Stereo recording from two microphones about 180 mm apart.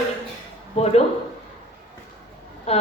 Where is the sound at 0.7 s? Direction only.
35° left (ahead or behind).